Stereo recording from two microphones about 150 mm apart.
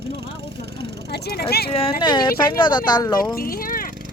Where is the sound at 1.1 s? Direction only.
90° left.